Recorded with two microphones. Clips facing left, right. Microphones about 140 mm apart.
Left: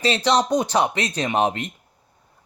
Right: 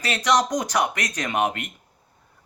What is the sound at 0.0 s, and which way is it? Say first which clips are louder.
Speech: left 2 dB; 30° left (ahead or behind).